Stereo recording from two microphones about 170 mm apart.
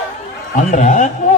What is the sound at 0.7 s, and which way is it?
Speech, 45° left (ahead or behind).